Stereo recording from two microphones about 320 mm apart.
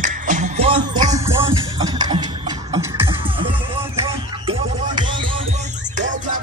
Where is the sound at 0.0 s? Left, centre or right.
Right.